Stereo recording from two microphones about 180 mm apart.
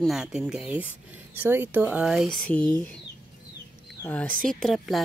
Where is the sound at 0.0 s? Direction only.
5° right (ahead or behind).